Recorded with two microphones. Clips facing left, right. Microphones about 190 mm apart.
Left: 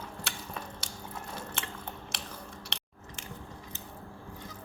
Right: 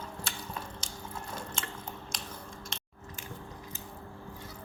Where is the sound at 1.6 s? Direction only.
65° left (ahead or behind).